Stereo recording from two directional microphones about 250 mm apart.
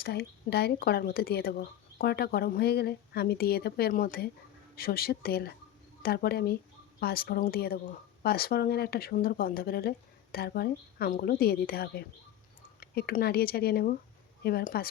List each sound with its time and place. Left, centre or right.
0.0 s speech: left